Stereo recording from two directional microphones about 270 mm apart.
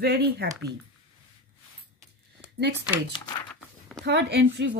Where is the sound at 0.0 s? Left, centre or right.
Right.